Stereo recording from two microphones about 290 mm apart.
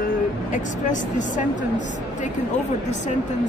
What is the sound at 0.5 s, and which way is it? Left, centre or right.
Speech, left.